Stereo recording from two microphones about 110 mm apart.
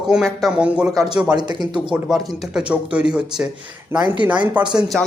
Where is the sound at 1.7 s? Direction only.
5° right (ahead or behind).